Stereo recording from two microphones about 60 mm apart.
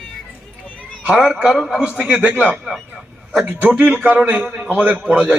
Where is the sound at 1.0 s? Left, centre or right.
Centre.